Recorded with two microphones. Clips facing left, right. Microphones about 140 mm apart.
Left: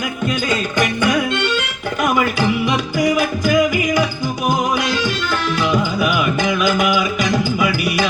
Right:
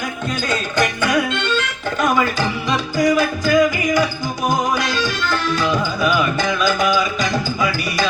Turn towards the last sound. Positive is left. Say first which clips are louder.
# even
turn(degrees=15)  # may be behind; listen again after turning